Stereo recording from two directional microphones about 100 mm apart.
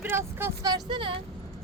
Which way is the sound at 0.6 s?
40° right (ahead or behind).